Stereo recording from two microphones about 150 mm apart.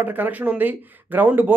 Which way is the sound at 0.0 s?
10° right (ahead or behind).